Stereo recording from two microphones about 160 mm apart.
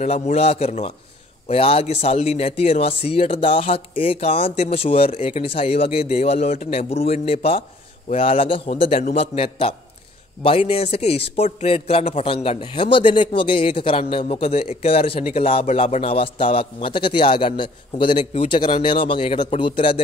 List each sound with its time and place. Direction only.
0.0 s a man's voice: 45° left (ahead or behind)